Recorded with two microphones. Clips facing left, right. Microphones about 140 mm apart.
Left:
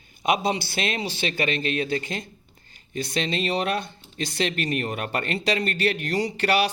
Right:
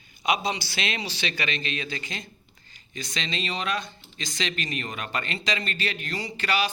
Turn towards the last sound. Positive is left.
turn(degrees=65)  # may be behind; listen again after turning